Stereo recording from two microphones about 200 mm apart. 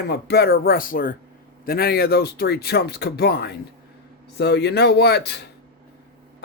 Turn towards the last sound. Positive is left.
turn(degrees=55)  # may be behind; listen again after turning